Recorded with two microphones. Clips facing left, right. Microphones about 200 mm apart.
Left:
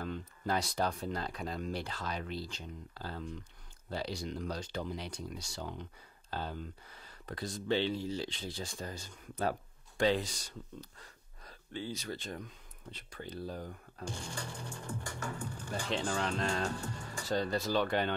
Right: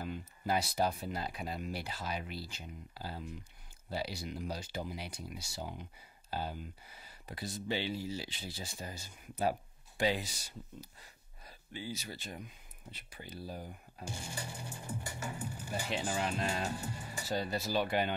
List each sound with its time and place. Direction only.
0.0 s speech: 10° right (ahead or behind)